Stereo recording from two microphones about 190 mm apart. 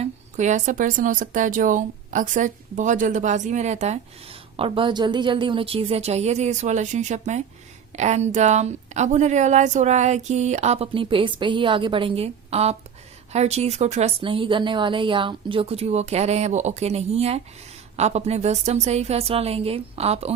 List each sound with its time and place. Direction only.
0.0 s speech: 40° right (ahead or behind)